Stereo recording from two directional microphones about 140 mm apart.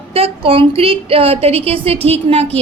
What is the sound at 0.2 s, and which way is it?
A woman's voice, 40° right (ahead or behind).